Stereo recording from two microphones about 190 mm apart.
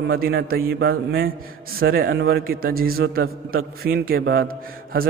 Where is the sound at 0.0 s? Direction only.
55° right (ahead or behind).